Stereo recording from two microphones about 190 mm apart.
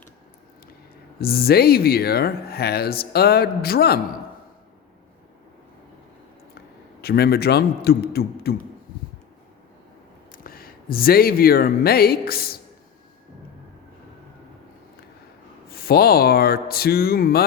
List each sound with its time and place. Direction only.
1.2 s speech: 55° left (ahead or behind)
7.0 s speech: 55° left (ahead or behind)
10.3 s speech: 50° left (ahead or behind)
15.7 s speech: 55° left (ahead or behind)